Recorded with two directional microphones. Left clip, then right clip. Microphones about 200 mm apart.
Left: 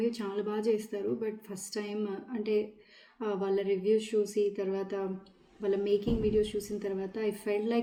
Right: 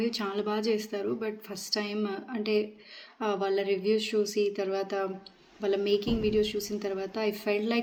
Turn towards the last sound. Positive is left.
turn(degrees=10)  # may be behind; listen again after turning